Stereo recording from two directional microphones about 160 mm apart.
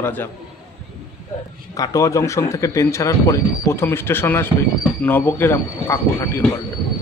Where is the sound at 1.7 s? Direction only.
20° left (ahead or behind).